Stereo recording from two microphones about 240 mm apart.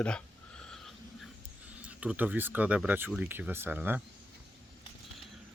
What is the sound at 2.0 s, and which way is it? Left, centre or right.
Speech, centre.